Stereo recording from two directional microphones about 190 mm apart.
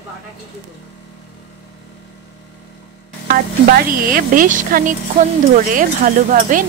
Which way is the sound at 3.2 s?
50° right (ahead or behind).